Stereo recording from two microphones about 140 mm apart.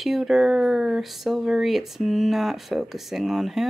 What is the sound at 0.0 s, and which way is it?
Speech, centre (ahead or behind).